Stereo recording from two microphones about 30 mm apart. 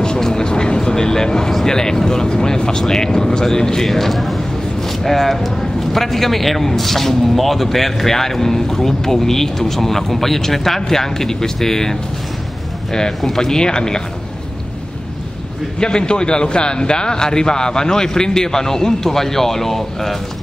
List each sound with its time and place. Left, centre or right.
0.0 s vehicle: left
1.5 s a man's voice: centre
13.2 s a man's voice: centre
15.8 s a man's voice: left; by 20.2 s centre